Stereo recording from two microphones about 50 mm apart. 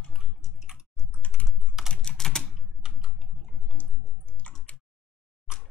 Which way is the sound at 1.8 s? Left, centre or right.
Centre.